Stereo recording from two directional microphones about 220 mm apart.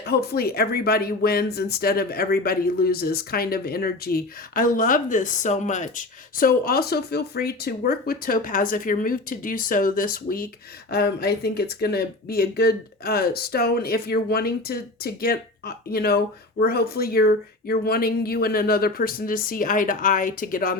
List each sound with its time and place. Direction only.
0.0 s speech: 45° left (ahead or behind)